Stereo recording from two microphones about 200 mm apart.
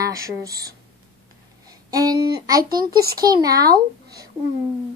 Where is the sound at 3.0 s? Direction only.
50° right (ahead or behind).